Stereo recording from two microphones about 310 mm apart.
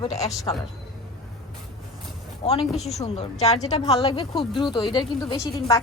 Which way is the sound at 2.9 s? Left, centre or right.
Left.